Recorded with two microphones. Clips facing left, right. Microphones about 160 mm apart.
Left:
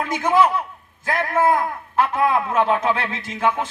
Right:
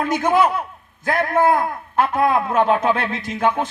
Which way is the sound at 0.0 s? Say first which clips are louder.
Right 1 dB; 30° right (ahead or behind).